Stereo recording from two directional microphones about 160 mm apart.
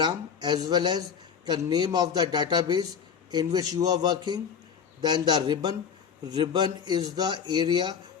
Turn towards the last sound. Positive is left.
turn(degrees=-30)  # may be behind; listen again after turning